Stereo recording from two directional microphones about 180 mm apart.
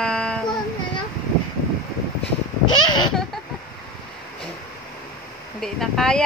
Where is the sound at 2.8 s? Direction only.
25° left (ahead or behind).